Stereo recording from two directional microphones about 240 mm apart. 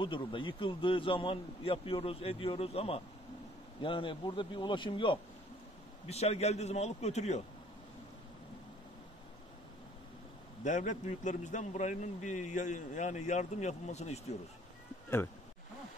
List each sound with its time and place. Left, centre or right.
0.0 s a man's voice: left
10.6 s a man's voice: left